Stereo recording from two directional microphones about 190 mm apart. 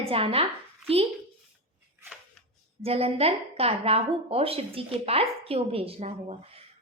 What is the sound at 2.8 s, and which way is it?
A woman's voice, 30° right (ahead or behind).